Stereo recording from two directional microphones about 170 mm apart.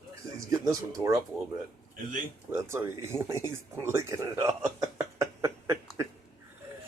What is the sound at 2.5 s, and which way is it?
Speech, 15° right (ahead or behind).